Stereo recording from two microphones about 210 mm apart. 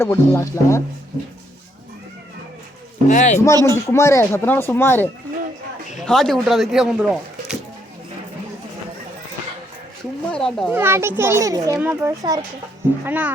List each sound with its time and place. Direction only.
0.0 s speech: 10° left (ahead or behind)
3.1 s speech: 35° left (ahead or behind)
3.4 s speech: 15° left (ahead or behind)
6.1 s speech: centre (ahead or behind)
10.3 s a child's voice: centre (ahead or behind)
10.7 s a child's voice: 10° right (ahead or behind)